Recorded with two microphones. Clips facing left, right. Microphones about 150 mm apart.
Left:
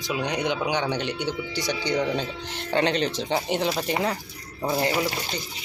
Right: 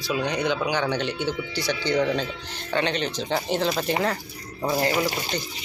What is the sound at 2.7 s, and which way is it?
Speech, 35° left (ahead or behind).